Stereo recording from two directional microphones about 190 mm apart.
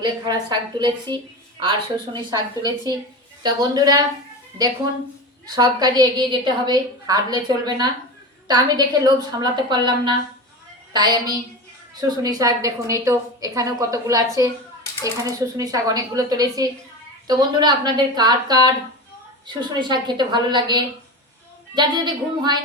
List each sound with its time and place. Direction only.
0.0 s a woman's voice: 25° right (ahead or behind)
5.5 s a woman's voice: 20° right (ahead or behind)
19.8 s a woman's voice: 25° right (ahead or behind)